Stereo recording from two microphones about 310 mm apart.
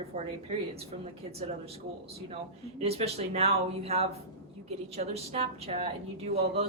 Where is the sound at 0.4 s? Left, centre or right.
Centre.